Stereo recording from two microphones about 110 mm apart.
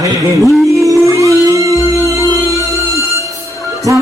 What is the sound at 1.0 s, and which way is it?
Music, 30° right (ahead or behind).